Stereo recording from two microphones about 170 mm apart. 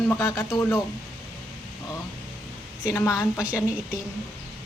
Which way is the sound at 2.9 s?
20° left (ahead or behind).